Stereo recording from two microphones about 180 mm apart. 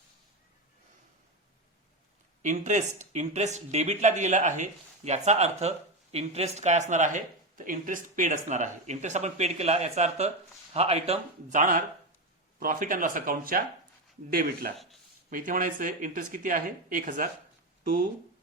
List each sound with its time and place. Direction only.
2.4 s speech: 40° right (ahead or behind)